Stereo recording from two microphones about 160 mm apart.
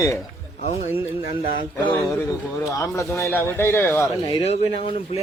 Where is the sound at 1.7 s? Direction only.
20° left (ahead or behind).